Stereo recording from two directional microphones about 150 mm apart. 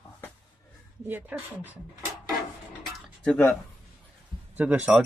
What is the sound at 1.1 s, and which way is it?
Speech, 10° right (ahead or behind).